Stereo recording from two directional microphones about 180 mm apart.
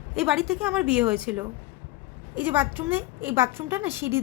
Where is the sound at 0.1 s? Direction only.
5° right (ahead or behind).